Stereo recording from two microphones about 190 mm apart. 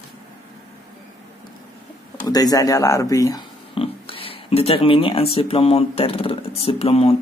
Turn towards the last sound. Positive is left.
turn(degrees=35)  # may be behind; listen again after turning